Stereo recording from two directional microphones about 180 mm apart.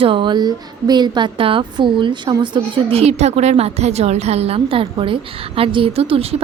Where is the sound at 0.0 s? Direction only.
30° right (ahead or behind).